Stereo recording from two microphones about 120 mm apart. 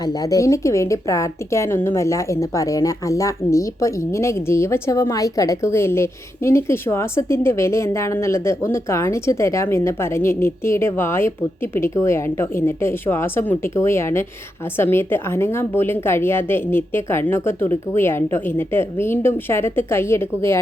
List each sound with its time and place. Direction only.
0.0 s a woman's voice: 30° left (ahead or behind)